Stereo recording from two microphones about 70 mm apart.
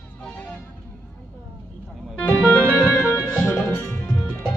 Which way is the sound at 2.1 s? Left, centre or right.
Left.